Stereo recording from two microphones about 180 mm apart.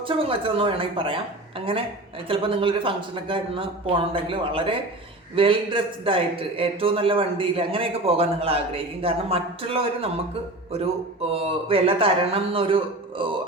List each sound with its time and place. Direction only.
0.2 s a man's voice: 30° right (ahead or behind)